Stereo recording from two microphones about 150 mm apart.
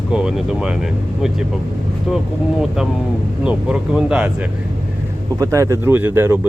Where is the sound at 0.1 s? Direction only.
5° right (ahead or behind).